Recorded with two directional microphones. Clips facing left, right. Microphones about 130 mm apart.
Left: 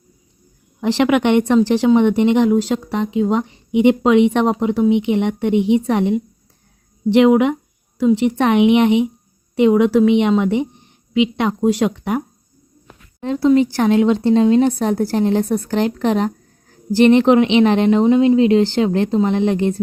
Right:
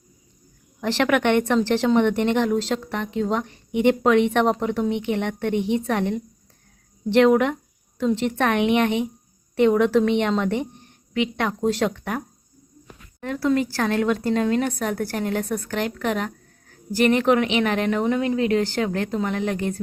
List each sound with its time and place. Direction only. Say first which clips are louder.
0.8 s speech: left 5 dB; 15° left (ahead or behind)